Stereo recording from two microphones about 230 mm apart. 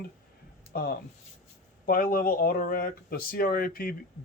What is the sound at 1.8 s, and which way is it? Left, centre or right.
Speech, left.